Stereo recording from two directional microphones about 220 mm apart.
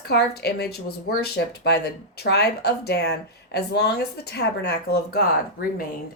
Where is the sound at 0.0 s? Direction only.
45° left (ahead or behind).